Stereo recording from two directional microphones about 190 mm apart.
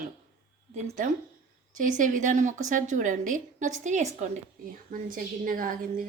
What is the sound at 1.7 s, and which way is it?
A woman's voice, 40° right (ahead or behind).